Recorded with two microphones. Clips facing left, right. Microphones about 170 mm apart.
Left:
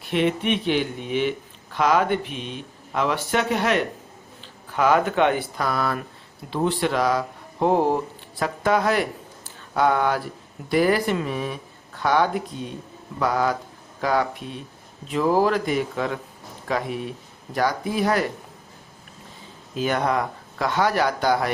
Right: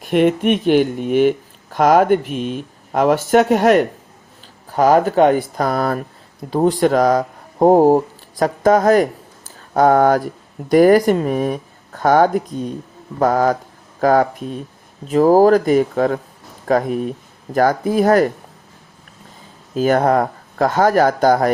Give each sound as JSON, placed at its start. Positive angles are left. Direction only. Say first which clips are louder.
{"t": 0.0, "sound": "speech", "louder": "right 8 dB", "side_deg": -50}
{"t": 19.7, "sound": "speech", "louder": "right 8 dB", "side_deg": -45}